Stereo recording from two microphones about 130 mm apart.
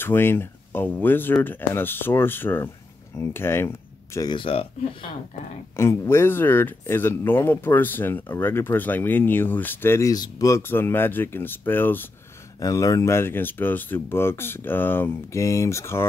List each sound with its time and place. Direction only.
0.0 s speech: 15° left (ahead or behind)
4.3 s speech: 45° left (ahead or behind)
5.8 s speech: 20° left (ahead or behind)
12.5 s speech: 25° left (ahead or behind)